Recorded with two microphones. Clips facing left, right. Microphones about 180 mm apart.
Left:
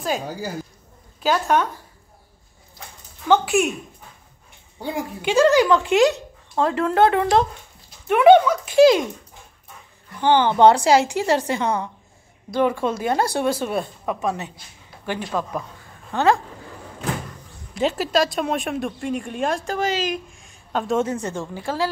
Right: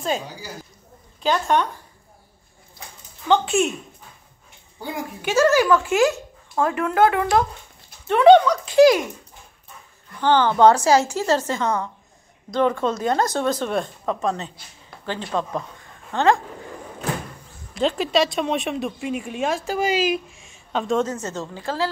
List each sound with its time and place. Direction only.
0.3 s speech: 50° left (ahead or behind)
1.2 s speech: 5° left (ahead or behind)
3.6 s speech: 15° left (ahead or behind)
5.2 s speech: 15° left (ahead or behind)
8.1 s speech: 10° left (ahead or behind)
10.2 s speech: 15° left (ahead or behind)
17.7 s speech: 5° left (ahead or behind)
21.0 s speech: 15° left (ahead or behind)